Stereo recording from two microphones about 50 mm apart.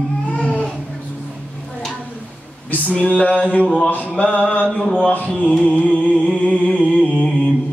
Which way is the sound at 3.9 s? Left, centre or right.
Left.